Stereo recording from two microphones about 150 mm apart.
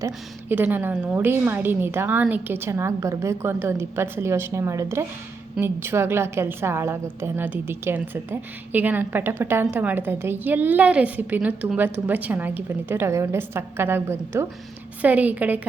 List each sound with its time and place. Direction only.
0.0 s a woman's voice: 15° right (ahead or behind)